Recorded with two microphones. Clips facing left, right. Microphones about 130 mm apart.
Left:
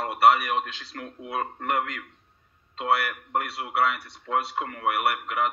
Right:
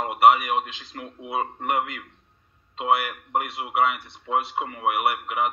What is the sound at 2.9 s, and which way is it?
A man's voice, 20° right (ahead or behind).